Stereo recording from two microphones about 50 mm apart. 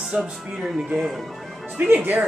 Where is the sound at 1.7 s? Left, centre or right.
Right.